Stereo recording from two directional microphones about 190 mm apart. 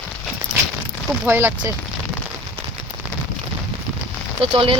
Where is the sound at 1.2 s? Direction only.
15° right (ahead or behind).